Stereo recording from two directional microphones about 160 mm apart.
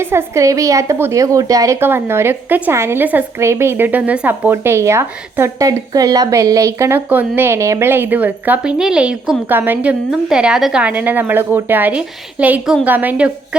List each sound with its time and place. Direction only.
0.0 s a woman's voice: 15° right (ahead or behind)